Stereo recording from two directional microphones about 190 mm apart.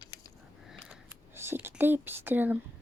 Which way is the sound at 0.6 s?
5° right (ahead or behind).